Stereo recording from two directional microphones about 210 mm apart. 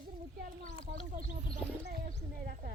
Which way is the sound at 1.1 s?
40° right (ahead or behind).